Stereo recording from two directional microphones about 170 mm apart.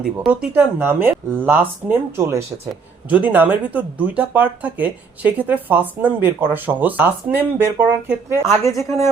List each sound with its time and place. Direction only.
0.2 s speech: 5° right (ahead or behind)
8.6 s a woman's voice: 20° left (ahead or behind)